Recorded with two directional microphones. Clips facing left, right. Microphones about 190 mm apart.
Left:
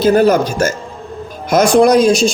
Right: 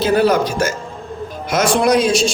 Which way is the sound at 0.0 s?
45° left (ahead or behind).